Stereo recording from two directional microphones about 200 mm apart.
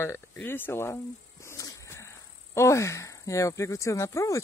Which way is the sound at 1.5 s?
15° left (ahead or behind).